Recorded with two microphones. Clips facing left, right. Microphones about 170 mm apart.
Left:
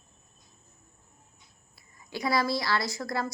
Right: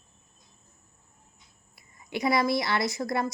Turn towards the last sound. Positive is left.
turn(degrees=-20)  # may be behind; listen again after turning